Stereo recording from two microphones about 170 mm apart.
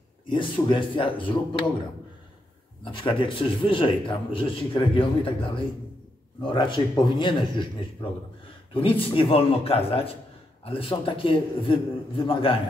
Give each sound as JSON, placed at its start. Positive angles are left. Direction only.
{"t": 0.3, "sound": "speech", "side_deg": 30}
{"t": 2.8, "sound": "a man's voice", "side_deg": 30}